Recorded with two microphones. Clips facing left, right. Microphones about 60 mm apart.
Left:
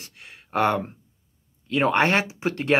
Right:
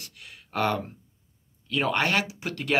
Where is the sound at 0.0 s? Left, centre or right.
Left.